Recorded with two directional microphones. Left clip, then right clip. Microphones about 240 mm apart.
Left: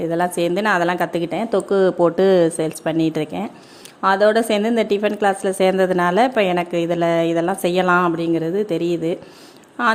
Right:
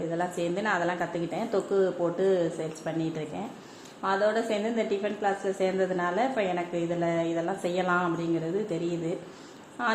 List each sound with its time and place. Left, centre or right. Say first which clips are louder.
0.1 s a woman's voice: left 11 dB; left